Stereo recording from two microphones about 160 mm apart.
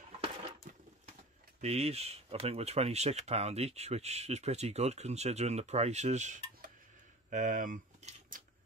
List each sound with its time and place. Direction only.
1.6 s speech: 40° right (ahead or behind)
7.2 s typewriter: 50° right (ahead or behind)